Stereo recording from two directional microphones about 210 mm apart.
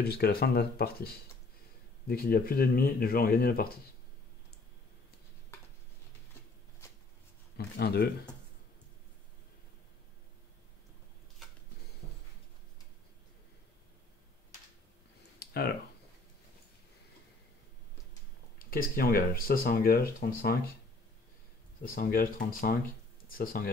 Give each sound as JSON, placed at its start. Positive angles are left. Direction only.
{"t": 0.0, "sound": "speech", "side_deg": 50}
{"t": 7.5, "sound": "speech", "side_deg": 50}
{"t": 15.3, "sound": "a sound", "side_deg": 50}
{"t": 18.7, "sound": "speech", "side_deg": 45}
{"t": 21.8, "sound": "speech", "side_deg": 45}